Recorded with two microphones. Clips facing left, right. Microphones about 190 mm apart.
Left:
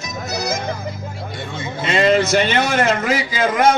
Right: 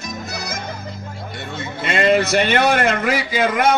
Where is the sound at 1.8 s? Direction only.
55° right (ahead or behind).